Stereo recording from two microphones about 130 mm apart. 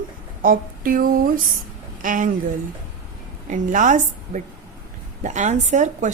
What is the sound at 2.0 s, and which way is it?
Speech, 90° right.